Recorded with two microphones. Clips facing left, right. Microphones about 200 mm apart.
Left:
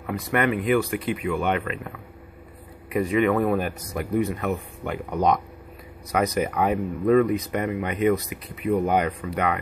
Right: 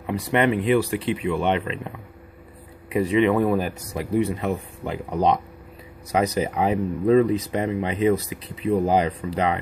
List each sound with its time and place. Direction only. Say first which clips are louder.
0.3 s speech: right 2 dB; 25° right (ahead or behind)
2.9 s speech: right 2 dB; 30° right (ahead or behind)